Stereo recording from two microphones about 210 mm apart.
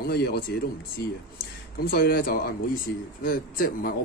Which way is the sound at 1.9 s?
45° left (ahead or behind).